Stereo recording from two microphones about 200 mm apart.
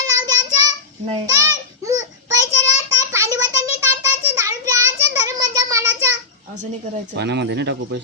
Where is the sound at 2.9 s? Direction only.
15° right (ahead or behind).